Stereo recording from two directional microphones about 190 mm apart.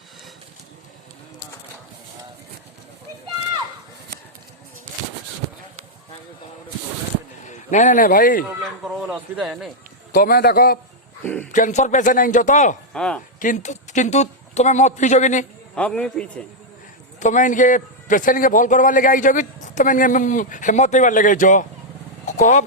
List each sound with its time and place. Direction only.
7.4 s a man's voice: 40° left (ahead or behind)
8.4 s speech: centre (ahead or behind)
10.1 s a man's voice: 50° left (ahead or behind)
11.2 s speech: 5° left (ahead or behind)
11.5 s a man's voice: 40° left (ahead or behind)
12.9 s speech: 5° left (ahead or behind)
13.4 s speech: 40° left (ahead or behind)
15.7 s speech: 5° left (ahead or behind)
17.2 s a man's voice: 40° left (ahead or behind)
22.3 s vehicle: 40° left (ahead or behind)